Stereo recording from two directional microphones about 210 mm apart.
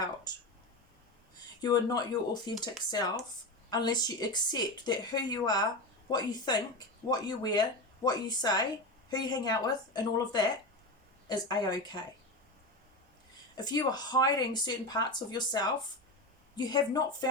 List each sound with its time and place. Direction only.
1.6 s speech: 20° left (ahead or behind)
3.7 s speech: 20° left (ahead or behind)
13.6 s speech: 20° left (ahead or behind)